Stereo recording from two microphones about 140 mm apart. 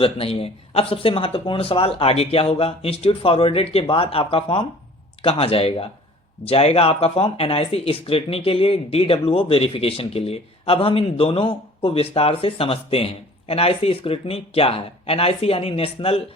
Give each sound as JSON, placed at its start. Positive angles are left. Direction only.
{"t": 0.0, "sound": "speech", "side_deg": 40}